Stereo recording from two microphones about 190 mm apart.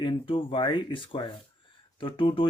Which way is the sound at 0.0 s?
25° left (ahead or behind).